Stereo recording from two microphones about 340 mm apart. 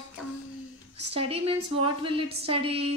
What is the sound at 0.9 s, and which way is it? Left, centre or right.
A woman's voice, centre.